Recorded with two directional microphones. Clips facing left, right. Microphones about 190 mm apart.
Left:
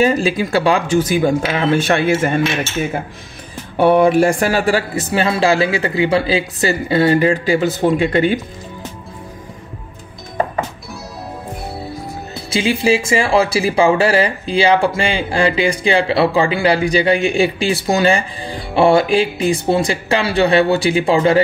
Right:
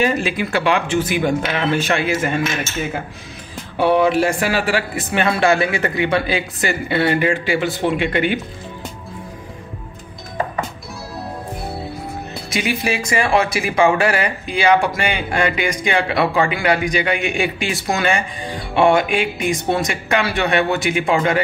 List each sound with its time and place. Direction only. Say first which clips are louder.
0.0 s speech: left 4 dB; 35° left (ahead or behind)
3.7 s speech: left 4 dB; 50° left (ahead or behind)
12.4 s speech: left 6 dB; 30° left (ahead or behind)